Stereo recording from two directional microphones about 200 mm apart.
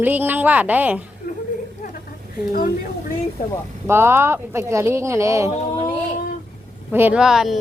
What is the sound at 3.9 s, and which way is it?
Speech, 10° right (ahead or behind).